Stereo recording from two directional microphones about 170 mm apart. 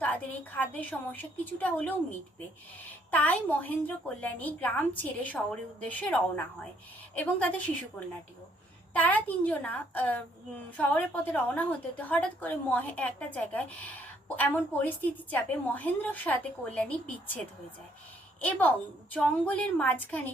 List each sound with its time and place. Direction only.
0.0 s a woman's voice: 10° left (ahead or behind)
9.0 s a woman's voice: 10° left (ahead or behind)